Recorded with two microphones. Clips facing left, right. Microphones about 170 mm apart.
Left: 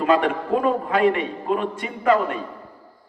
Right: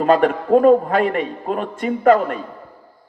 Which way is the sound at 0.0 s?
45° right (ahead or behind).